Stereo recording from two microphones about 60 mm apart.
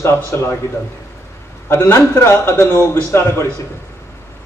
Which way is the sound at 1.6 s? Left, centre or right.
Left.